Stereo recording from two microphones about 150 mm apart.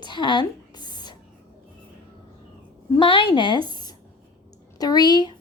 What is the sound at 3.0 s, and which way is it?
A woman's voice, 35° left (ahead or behind).